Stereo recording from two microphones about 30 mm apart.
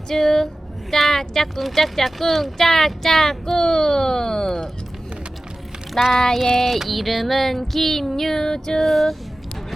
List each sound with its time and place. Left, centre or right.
0.1 s female singing: centre
3.6 s speech: left
6.0 s female singing: centre
6.7 s female singing: centre; by 8.8 s left
8.8 s a sound: centre